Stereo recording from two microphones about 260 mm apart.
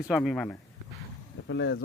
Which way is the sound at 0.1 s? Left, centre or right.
Centre.